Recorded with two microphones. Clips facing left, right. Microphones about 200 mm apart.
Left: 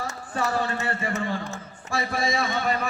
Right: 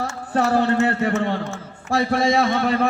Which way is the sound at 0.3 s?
70° right (ahead or behind).